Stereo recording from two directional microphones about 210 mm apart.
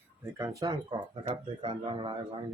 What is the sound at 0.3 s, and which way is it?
Speech, 15° right (ahead or behind).